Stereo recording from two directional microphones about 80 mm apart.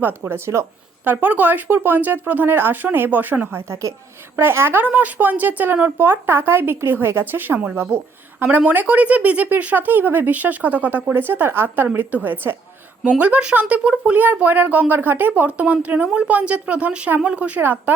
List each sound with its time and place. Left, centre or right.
0.0 s a woman's voice: right